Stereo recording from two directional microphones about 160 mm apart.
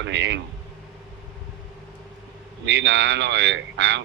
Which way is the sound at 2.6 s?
90° right.